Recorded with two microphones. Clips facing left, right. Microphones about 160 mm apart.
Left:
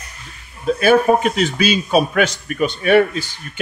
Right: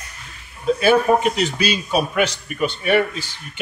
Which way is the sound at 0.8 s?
50° left (ahead or behind).